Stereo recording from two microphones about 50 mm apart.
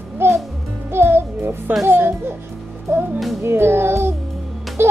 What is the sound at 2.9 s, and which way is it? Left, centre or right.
Speech, right.